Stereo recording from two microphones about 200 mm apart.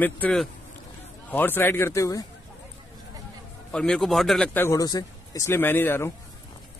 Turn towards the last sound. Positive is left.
turn(degrees=10)  # may be behind; listen again after turning